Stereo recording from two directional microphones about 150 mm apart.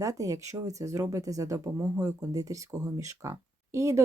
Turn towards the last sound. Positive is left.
turn(degrees=-20)  # may be behind; listen again after turning